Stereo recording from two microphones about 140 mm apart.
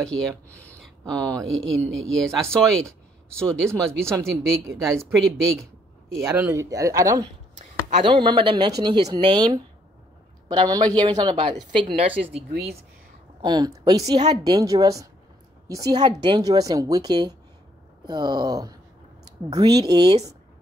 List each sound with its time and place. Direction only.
0.0 s speech: 5° left (ahead or behind)
4.0 s a woman's voice: 20° right (ahead or behind)
4.7 s speech: 5° left (ahead or behind)
6.2 s a woman's voice: 20° right (ahead or behind)
8.0 s speech: 35° right (ahead or behind)
12.0 s speech: 50° right (ahead or behind)
13.4 s a woman's voice: 30° right (ahead or behind)